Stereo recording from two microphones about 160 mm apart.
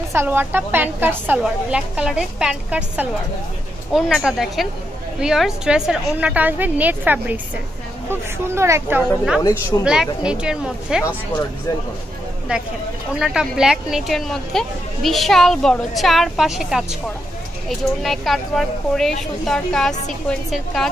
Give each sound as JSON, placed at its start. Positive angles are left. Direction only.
{"t": 0.1, "sound": "a woman's voice", "side_deg": -15}
{"t": 9.8, "sound": "speech", "side_deg": -5}
{"t": 13.2, "sound": "speech", "side_deg": -5}